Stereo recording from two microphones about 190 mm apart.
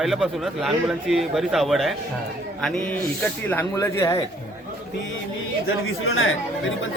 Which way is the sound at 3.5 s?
15° left (ahead or behind).